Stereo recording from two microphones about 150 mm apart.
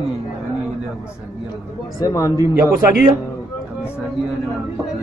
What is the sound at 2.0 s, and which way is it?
Speech, 20° left (ahead or behind).